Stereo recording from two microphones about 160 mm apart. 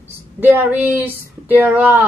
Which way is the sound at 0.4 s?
10° right (ahead or behind).